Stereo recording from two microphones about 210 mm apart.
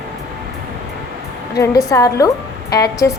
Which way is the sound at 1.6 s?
15° left (ahead or behind).